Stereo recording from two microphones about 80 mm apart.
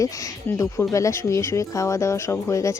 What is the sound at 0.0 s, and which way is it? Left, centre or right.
A woman's voice, left.